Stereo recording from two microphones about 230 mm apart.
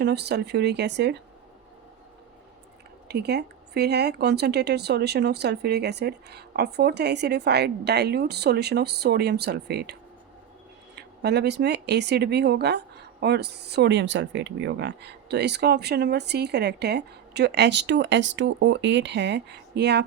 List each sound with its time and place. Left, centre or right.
0.0 s speech: right
3.1 s speech: right